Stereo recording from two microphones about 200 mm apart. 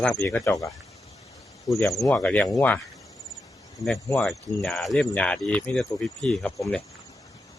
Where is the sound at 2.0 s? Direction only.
10° left (ahead or behind).